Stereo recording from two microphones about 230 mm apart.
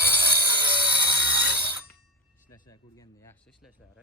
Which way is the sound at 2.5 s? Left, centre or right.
Centre.